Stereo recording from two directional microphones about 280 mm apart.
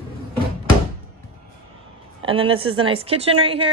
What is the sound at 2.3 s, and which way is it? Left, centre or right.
Speech, centre.